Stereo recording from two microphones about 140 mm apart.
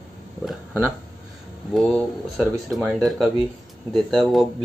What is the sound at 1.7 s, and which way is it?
Speech, centre (ahead or behind).